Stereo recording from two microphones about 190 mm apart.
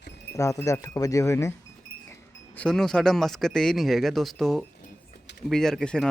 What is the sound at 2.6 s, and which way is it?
Speech, 5° left (ahead or behind).